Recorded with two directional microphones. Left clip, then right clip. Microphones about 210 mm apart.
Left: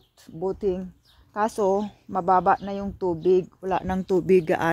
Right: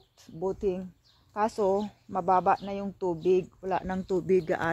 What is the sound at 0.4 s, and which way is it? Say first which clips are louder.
Speech: left 4 dB; 35° left (ahead or behind).